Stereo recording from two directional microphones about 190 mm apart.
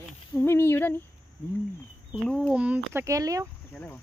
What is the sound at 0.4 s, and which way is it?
Speech, 10° left (ahead or behind).